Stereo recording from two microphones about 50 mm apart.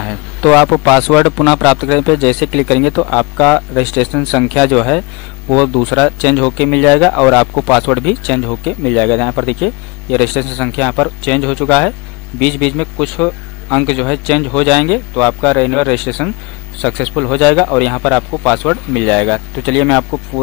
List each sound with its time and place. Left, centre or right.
0.0 s speech: centre